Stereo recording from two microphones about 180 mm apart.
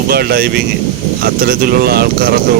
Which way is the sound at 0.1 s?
60° right (ahead or behind).